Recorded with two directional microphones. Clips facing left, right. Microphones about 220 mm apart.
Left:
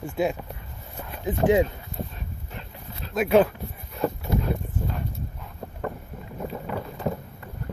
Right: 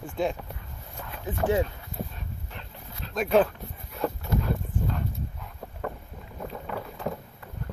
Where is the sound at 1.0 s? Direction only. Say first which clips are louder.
Left 5 dB; 20° left (ahead or behind).